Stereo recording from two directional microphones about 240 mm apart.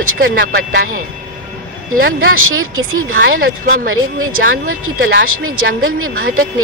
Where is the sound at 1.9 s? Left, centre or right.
Right.